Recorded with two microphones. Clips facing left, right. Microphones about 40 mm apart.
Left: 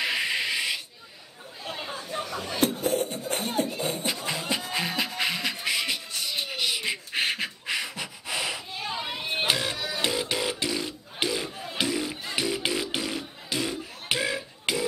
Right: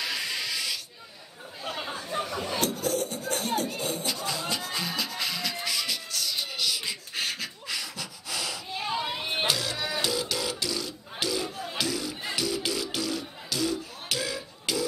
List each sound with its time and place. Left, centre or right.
0.0 s a sound: left
1.8 s chatter: centre
2.6 s music: left
8.7 s a sound: centre
9.5 s music: left
9.8 s music: centre
10.0 s music: left